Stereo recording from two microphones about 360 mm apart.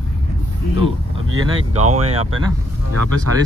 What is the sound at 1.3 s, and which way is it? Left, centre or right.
Speech, right.